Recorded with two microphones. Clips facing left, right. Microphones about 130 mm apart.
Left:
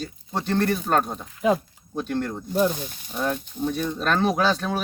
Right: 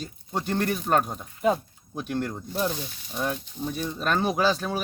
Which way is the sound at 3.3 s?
60° left (ahead or behind).